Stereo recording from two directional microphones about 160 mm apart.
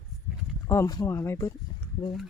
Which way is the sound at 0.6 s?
20° left (ahead or behind).